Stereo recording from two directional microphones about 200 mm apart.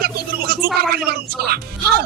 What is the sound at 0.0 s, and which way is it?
Music, 50° right (ahead or behind).